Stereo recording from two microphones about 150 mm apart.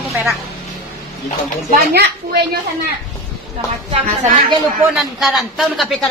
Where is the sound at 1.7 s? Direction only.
90° right.